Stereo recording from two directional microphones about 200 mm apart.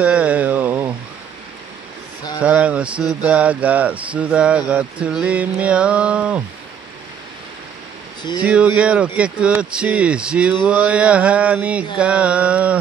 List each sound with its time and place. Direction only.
0.0 s a sound: 5° right (ahead or behind)
2.4 s speech: 5° right (ahead or behind)
8.2 s speech: 20° left (ahead or behind)
8.5 s speech: 5° right (ahead or behind)
12.0 s mantra: 5° right (ahead or behind)